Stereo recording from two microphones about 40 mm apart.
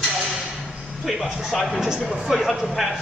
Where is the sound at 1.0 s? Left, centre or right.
Centre.